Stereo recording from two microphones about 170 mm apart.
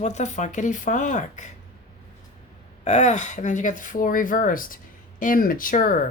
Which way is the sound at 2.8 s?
45° left (ahead or behind).